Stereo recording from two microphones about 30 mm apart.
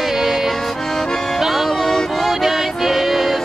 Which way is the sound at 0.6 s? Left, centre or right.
Centre.